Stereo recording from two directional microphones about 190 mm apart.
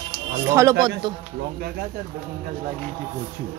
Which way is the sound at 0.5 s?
15° right (ahead or behind).